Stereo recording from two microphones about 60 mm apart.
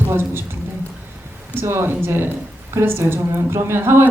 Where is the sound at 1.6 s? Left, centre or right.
Right.